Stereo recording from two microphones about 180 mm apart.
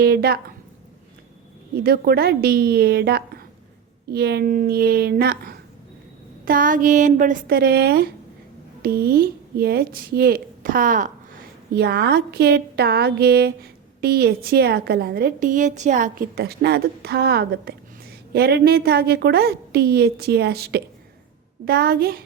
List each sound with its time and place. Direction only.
0.0 s a woman's voice: 60° right (ahead or behind)
1.7 s a woman's voice: 55° right (ahead or behind)
11.7 s a woman's voice: 60° right (ahead or behind)